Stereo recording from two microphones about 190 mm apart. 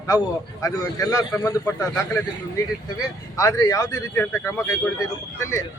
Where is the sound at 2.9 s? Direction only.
20° left (ahead or behind).